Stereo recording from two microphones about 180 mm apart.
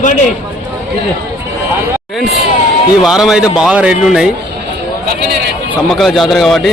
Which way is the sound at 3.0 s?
Centre (ahead or behind).